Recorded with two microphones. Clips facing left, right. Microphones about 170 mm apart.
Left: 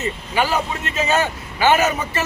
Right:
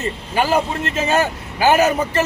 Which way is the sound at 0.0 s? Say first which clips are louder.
Right 1 dB; 40° right (ahead or behind).